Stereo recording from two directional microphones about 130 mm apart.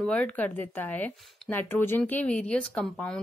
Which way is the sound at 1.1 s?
5° left (ahead or behind).